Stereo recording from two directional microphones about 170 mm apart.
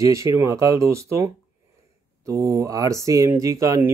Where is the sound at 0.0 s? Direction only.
15° right (ahead or behind).